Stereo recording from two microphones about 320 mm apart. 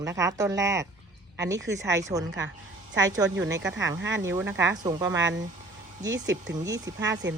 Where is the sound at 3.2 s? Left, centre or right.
Right.